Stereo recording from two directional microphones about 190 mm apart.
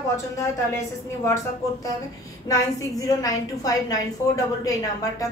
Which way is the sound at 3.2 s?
20° left (ahead or behind).